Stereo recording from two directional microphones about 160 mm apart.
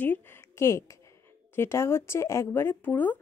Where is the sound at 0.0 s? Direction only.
10° left (ahead or behind).